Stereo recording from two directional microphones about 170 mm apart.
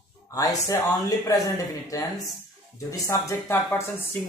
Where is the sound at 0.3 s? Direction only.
20° left (ahead or behind).